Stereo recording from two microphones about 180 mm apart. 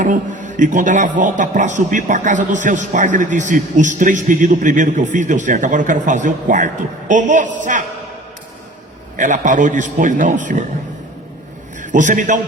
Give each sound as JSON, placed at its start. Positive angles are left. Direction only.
{"t": 0.0, "sound": "a man's voice", "side_deg": -45}
{"t": 9.1, "sound": "a man's voice", "side_deg": -45}
{"t": 11.8, "sound": "a man's voice", "side_deg": -45}